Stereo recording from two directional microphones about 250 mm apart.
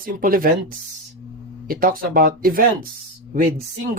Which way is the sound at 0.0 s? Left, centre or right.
Right.